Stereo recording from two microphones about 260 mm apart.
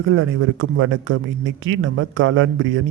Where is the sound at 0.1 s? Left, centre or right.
Right.